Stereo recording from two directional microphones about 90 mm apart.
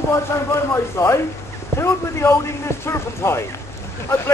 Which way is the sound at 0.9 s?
30° left (ahead or behind).